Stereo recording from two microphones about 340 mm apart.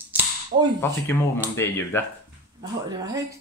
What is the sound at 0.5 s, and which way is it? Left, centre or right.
Speech, right.